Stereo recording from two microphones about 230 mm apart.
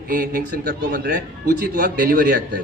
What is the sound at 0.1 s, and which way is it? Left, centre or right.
A man's voice, right.